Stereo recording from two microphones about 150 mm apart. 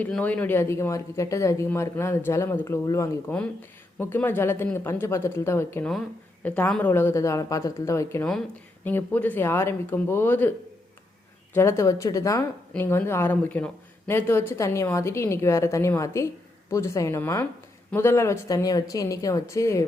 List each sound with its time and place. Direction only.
0.0 s a woman's voice: 10° left (ahead or behind)
8.2 s speech: 5° left (ahead or behind)
11.5 s a woman's voice: 20° left (ahead or behind)